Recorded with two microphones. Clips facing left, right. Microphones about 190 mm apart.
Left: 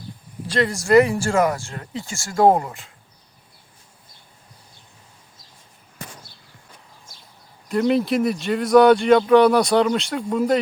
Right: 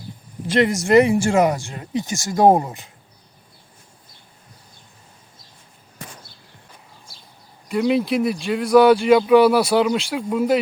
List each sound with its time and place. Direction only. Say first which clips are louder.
0.4 s speech: right 3 dB; 25° right (ahead or behind)
7.7 s speech: even; centre (ahead or behind)